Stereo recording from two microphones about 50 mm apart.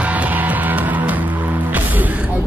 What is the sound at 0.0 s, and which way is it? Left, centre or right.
Music, right.